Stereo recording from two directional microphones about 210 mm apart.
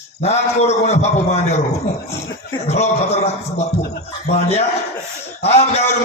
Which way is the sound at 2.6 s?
30° left (ahead or behind).